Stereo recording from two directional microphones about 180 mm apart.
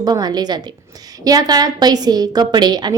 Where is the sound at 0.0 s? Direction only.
20° right (ahead or behind).